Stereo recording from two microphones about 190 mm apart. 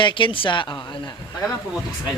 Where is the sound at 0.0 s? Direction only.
25° left (ahead or behind).